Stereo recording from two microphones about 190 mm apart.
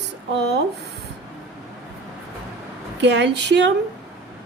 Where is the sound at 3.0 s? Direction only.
65° right (ahead or behind).